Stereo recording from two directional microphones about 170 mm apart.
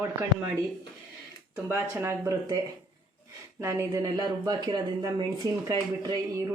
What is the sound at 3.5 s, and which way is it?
Speech, 15° right (ahead or behind).